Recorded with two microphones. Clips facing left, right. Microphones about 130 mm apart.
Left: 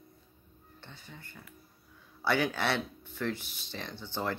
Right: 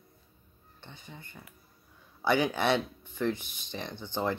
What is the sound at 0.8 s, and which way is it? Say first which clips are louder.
Speech: right 2 dB; 20° right (ahead or behind).